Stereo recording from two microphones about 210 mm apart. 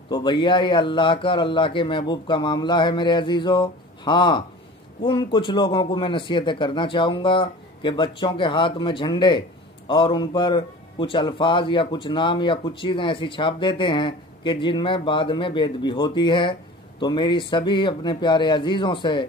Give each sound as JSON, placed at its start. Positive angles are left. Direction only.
{"t": 0.1, "sound": "a man's voice", "side_deg": 20}